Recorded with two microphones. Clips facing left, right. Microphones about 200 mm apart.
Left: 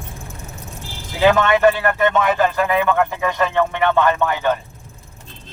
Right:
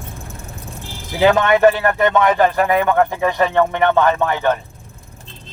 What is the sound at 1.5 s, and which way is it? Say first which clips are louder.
Speech: right 2 dB; 35° right (ahead or behind).